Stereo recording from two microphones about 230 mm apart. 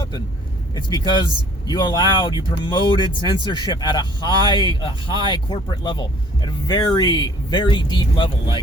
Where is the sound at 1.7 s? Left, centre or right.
Centre.